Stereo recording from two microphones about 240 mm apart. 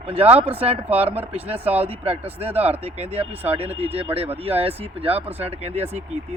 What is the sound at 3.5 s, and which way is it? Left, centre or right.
Speech, right.